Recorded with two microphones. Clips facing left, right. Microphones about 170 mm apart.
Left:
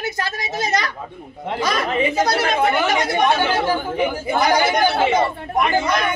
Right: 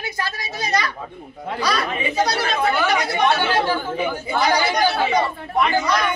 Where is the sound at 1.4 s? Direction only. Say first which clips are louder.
Left 1 dB; 20° left (ahead or behind).